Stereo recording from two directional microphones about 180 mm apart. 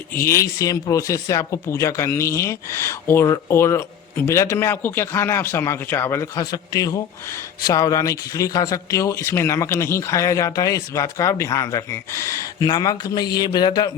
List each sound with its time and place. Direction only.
0.1 s speech: 15° left (ahead or behind)